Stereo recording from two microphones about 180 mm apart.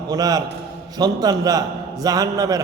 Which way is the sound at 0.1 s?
20° right (ahead or behind).